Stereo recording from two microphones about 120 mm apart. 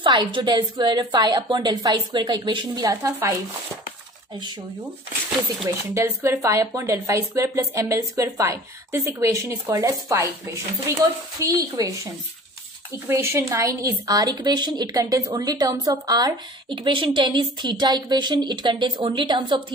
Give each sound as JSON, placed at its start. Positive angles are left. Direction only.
{"t": 0.0, "sound": "a woman's voice", "side_deg": -40}
{"t": 5.7, "sound": "speech", "side_deg": -20}
{"t": 13.1, "sound": "a woman's voice", "side_deg": -25}